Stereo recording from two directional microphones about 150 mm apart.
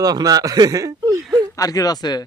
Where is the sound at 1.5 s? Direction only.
25° left (ahead or behind).